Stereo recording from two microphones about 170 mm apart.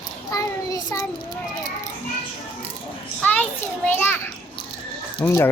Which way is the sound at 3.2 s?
10° left (ahead or behind).